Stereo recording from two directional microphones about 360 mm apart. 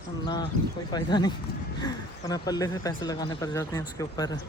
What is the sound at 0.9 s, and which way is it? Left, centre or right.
Speech, centre.